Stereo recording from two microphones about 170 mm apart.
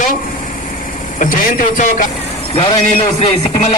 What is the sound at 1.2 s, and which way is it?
Speech, 50° left (ahead or behind).